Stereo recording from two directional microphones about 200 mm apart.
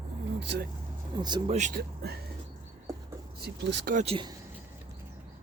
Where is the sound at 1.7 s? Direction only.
55° right (ahead or behind).